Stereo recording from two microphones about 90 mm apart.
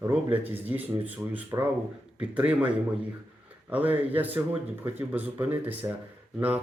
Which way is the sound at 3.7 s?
20° right (ahead or behind).